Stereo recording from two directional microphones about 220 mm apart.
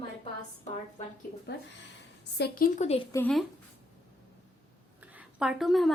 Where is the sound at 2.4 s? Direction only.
40° left (ahead or behind).